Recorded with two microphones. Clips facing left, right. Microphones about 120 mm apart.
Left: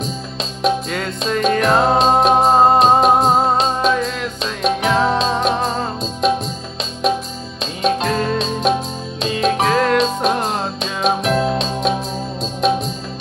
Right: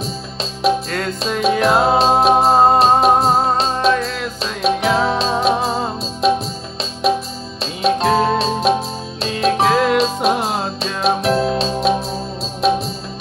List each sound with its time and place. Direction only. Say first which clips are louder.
0.6 s music: right 1 dB; centre (ahead or behind)
11.2 s music: right 1 dB; 35° right (ahead or behind)
12.6 s music: right 1 dB; centre (ahead or behind)